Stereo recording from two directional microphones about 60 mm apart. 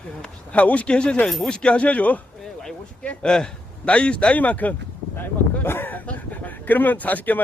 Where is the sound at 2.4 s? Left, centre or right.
Centre.